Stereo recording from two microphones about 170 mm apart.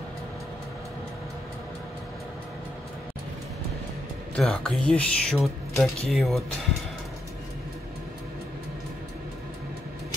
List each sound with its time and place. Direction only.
4.4 s speech: 5° left (ahead or behind)